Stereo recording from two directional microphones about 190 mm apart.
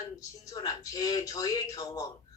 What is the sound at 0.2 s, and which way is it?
Speech, 15° left (ahead or behind).